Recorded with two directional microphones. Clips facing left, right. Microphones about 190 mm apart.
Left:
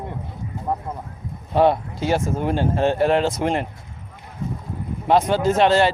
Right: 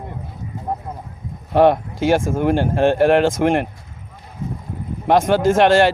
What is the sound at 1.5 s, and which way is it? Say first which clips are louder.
Speech: right 4 dB; 70° right (ahead or behind).